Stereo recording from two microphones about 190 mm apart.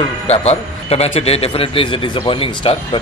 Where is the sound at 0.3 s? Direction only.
35° left (ahead or behind).